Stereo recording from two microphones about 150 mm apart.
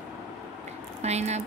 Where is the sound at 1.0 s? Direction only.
45° right (ahead or behind).